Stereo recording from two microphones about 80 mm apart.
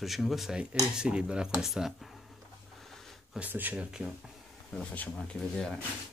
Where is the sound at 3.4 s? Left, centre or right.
Right.